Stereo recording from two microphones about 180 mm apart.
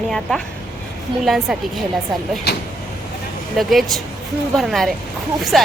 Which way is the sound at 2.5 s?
65° left (ahead or behind).